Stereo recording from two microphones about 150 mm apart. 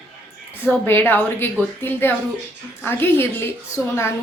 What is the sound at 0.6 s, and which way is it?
A woman's voice, 15° left (ahead or behind).